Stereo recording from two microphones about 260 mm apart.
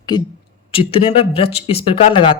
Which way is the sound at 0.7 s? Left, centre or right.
Left.